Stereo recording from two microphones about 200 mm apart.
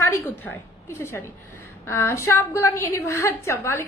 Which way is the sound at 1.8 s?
10° left (ahead or behind).